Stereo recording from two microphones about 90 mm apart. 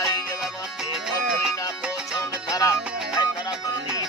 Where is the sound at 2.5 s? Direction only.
35° left (ahead or behind).